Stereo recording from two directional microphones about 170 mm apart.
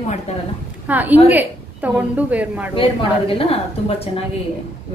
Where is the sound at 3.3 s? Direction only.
35° left (ahead or behind).